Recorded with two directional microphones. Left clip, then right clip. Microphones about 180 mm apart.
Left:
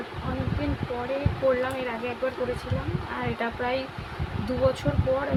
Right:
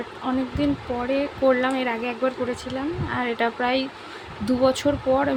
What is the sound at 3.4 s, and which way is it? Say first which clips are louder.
Speech: right 5 dB; 65° right (ahead or behind).